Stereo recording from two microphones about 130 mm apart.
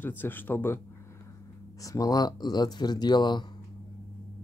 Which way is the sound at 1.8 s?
25° left (ahead or behind).